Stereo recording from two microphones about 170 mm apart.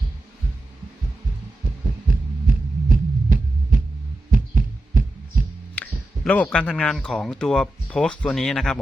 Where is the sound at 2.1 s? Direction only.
55° right (ahead or behind).